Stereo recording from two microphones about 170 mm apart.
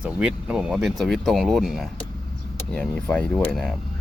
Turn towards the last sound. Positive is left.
turn(degrees=0)  # may be behind; listen again after turning